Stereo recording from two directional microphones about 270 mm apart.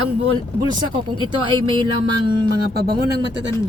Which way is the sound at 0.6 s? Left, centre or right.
Centre.